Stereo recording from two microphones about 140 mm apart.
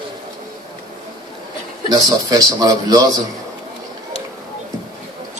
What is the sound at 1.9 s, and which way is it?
A man's voice, 30° right (ahead or behind).